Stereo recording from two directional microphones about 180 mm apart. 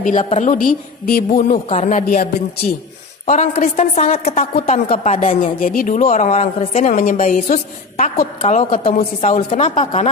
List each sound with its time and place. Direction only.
0.0 s a woman's voice: 45° left (ahead or behind)